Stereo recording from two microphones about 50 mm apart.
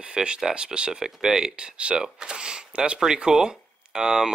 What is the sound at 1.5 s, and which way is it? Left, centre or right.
Speech, right.